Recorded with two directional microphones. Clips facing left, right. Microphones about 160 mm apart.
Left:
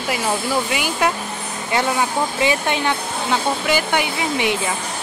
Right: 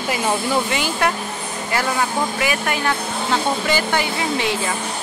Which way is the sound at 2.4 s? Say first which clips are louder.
Left 2 dB; 25° left (ahead or behind).